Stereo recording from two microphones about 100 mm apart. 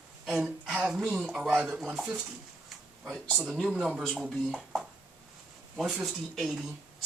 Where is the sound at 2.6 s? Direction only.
Centre (ahead or behind).